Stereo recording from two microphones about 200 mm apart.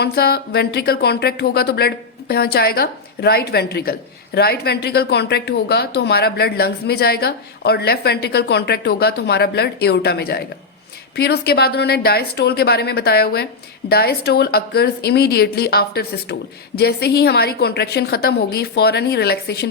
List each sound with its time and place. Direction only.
0.0 s speech: 50° left (ahead or behind)